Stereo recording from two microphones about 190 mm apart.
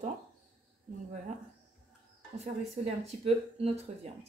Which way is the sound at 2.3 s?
30° right (ahead or behind).